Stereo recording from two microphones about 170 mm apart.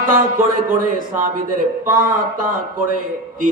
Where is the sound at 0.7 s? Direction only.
50° right (ahead or behind).